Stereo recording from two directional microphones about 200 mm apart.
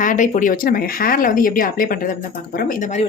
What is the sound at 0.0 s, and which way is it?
Speech, 40° left (ahead or behind).